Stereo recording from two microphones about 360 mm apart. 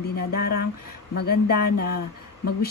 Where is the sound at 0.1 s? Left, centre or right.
Left.